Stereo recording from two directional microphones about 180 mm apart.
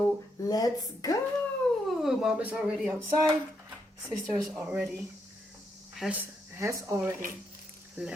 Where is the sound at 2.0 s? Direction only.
Centre (ahead or behind).